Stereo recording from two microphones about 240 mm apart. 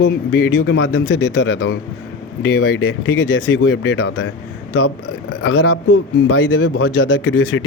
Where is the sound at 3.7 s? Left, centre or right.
Left.